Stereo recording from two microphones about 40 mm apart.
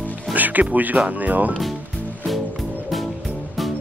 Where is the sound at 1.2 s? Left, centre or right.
Right.